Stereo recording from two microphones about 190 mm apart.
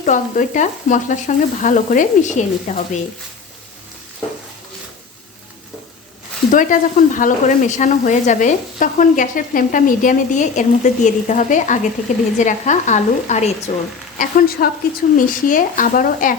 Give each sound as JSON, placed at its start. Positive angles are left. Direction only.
{"t": 0.0, "sound": "speech", "side_deg": 40}
{"t": 6.5, "sound": "speech", "side_deg": 45}